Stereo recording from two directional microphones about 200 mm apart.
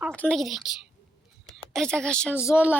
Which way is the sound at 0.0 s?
5° left (ahead or behind).